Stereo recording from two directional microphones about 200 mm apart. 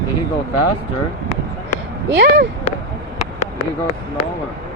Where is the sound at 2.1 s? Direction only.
55° right (ahead or behind).